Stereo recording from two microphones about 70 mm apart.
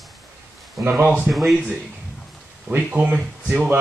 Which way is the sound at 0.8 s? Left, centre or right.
Right.